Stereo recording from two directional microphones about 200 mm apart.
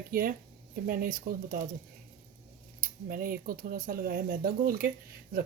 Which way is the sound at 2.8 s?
45° right (ahead or behind).